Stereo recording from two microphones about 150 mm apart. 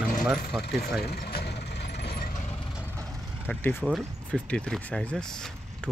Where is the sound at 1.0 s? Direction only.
90° left; by 2.5 s 65° left (ahead or behind).